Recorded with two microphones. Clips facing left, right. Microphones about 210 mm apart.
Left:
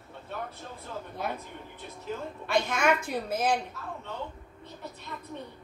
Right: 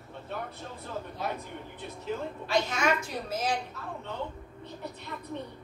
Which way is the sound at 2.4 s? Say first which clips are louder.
Left 2 dB; 55° left (ahead or behind).